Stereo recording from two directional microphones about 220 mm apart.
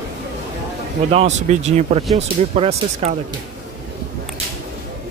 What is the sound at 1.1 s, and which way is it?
Speech, 30° right (ahead or behind).